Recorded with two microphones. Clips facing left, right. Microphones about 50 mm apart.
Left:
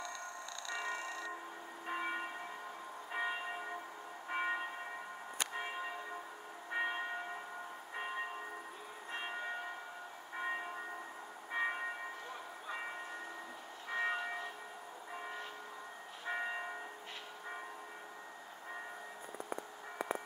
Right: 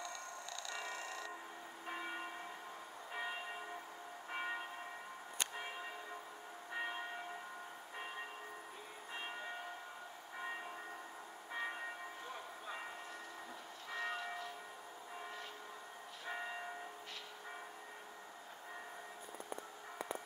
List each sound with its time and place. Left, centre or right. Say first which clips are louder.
0.7 s music: left 6 dB; left
1.9 s church bell: left 5 dB; left
4.3 s train: left 6 dB; centre
5.5 s church bell: left 5 dB; centre
9.1 s church bell: left 4 dB; centre
10.3 s train: left 6 dB; left
11.5 s bell: left 6 dB; left
13.8 s church bell: left 5 dB; left
16.3 s church bell: left 5 dB; left